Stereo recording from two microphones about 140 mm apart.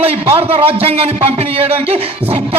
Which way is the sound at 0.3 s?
45° right (ahead or behind).